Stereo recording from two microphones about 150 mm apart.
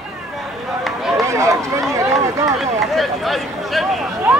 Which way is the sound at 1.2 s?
20° right (ahead or behind).